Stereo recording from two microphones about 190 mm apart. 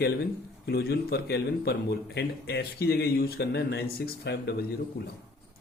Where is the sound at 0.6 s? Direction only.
55° left (ahead or behind).